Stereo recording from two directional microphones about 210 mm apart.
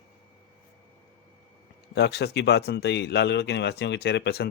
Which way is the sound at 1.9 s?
50° left (ahead or behind).